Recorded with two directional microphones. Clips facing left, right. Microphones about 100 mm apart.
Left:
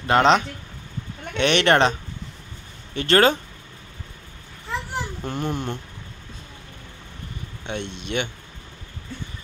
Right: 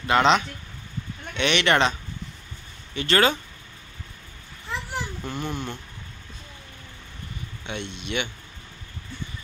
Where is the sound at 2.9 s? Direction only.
45° left (ahead or behind).